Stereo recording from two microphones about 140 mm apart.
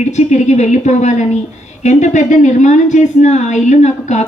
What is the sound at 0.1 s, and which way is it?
Speech, 55° left (ahead or behind).